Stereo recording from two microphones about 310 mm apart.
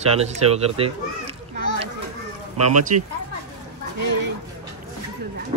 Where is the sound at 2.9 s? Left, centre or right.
Right.